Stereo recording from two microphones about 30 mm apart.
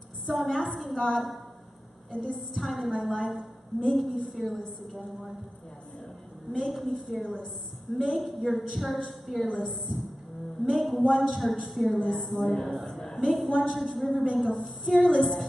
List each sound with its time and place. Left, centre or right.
0.3 s a woman's voice: centre
6.5 s a woman's voice: centre
12.8 s a sound: centre
13.2 s a woman's voice: centre